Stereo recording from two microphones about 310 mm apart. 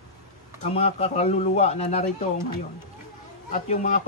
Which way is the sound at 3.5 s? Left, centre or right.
Left.